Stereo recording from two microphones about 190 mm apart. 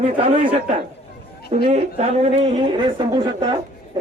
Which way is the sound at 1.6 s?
35° right (ahead or behind).